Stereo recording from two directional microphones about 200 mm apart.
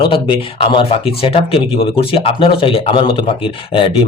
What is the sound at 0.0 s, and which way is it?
Speech, 25° left (ahead or behind).